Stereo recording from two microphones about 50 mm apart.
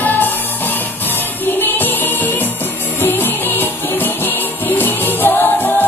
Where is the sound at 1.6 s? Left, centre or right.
Left.